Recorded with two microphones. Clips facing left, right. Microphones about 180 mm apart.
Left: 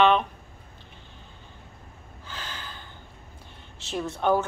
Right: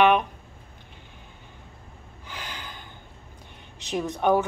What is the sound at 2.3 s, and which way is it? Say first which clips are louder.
Gasp: right 1 dB; 15° right (ahead or behind).